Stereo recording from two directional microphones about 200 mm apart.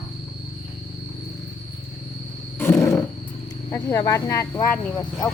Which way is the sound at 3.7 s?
15° left (ahead or behind).